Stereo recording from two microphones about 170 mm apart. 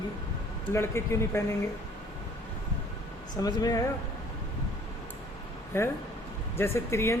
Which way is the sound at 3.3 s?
25° left (ahead or behind).